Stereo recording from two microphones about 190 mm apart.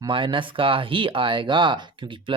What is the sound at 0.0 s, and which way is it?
A man's voice, 25° right (ahead or behind).